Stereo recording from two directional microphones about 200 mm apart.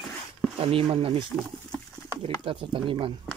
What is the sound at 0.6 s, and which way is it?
Speech, 30° right (ahead or behind).